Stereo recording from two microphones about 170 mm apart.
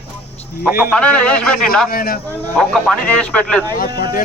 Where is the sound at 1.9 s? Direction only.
60° left (ahead or behind).